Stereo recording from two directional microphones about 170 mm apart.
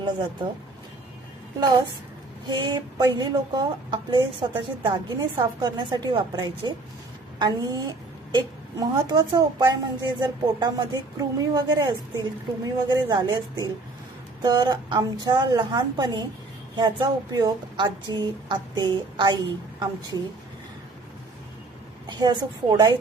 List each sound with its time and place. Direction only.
0.0 s a woman's voice: 25° right (ahead or behind)
2.5 s a woman's voice: 25° right (ahead or behind)
22.0 s a woman's voice: 25° right (ahead or behind)